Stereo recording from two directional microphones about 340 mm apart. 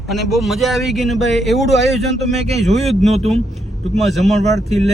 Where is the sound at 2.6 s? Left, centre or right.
Centre.